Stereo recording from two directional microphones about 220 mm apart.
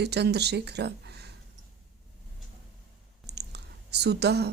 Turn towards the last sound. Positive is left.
turn(degrees=-50)  # may be behind; listen again after turning